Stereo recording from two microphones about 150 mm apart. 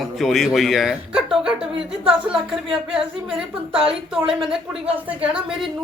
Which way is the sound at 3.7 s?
5° right (ahead or behind).